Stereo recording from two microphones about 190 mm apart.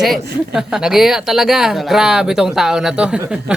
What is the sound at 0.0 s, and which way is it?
Speech, centre (ahead or behind).